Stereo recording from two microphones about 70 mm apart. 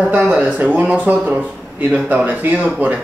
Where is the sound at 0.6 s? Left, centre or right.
Right.